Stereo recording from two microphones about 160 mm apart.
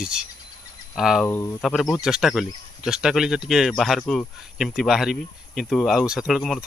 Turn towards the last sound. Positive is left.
turn(degrees=0)  # may be behind; listen again after turning